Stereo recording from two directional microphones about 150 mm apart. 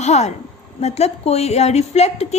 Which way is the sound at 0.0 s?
50° left (ahead or behind).